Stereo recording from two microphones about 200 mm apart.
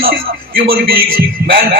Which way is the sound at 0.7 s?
50° right (ahead or behind).